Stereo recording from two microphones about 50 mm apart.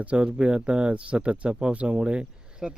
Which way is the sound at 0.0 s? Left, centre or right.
Right.